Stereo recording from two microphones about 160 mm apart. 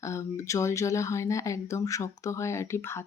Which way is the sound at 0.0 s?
20° left (ahead or behind).